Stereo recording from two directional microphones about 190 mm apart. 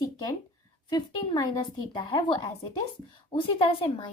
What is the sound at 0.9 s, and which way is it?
A woman's voice, 20° left (ahead or behind).